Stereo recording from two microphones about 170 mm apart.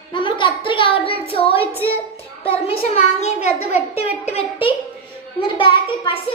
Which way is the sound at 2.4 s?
35° left (ahead or behind).